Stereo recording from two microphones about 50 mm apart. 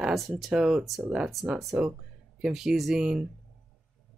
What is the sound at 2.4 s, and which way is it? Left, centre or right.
Speech, centre.